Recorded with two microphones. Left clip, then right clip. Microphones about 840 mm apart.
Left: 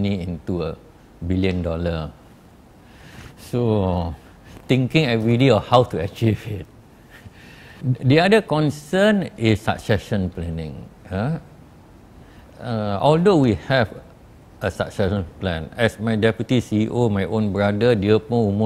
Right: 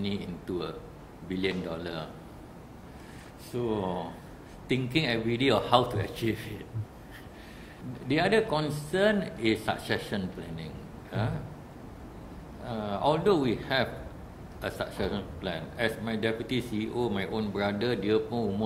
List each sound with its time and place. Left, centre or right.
0.0 s a man's voice: left
3.5 s a man's voice: left
8.1 s speech: left
12.6 s speech: left